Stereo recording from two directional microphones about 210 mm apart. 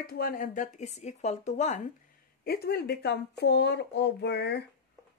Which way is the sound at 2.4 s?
50° left (ahead or behind).